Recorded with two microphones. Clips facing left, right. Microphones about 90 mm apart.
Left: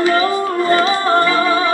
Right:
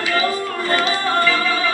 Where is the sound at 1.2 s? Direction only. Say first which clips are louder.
Left 4 dB; 30° left (ahead or behind).